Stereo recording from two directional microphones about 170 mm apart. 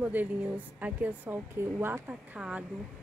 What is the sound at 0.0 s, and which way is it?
A woman's voice, 10° right (ahead or behind).